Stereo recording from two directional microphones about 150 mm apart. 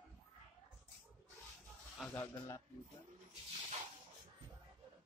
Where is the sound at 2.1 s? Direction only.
20° left (ahead or behind).